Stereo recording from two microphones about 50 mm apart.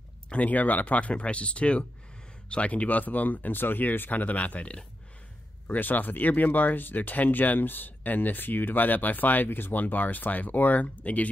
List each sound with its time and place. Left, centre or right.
0.3 s speech: left
5.7 s speech: left